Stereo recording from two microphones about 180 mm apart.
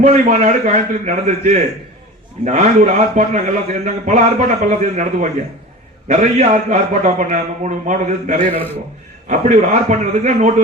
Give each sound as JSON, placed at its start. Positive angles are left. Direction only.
{"t": 0.0, "sound": "a man's voice", "side_deg": -40}